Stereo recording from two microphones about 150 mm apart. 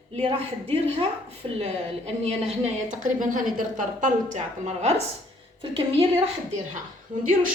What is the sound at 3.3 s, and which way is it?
A woman's voice, 60° right (ahead or behind).